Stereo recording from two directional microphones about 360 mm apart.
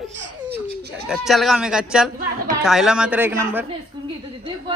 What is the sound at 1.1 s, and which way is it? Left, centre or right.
Speech, centre.